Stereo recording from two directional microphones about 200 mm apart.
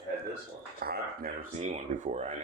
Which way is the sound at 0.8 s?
50° right (ahead or behind).